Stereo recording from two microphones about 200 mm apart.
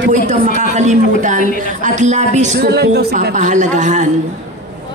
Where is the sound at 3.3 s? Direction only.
40° right (ahead or behind).